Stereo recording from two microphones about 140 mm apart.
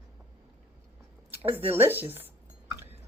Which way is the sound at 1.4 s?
45° right (ahead or behind).